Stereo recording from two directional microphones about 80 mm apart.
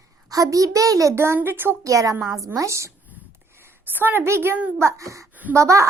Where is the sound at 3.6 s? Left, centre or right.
Right.